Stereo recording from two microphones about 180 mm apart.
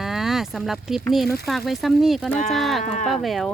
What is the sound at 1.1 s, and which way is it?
Speech, centre (ahead or behind).